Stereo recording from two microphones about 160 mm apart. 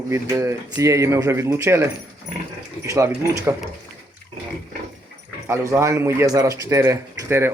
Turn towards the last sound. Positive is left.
turn(degrees=-15)  # may be behind; listen again after turning